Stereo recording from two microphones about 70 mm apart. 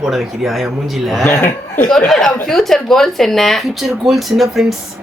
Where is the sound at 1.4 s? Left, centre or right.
Left.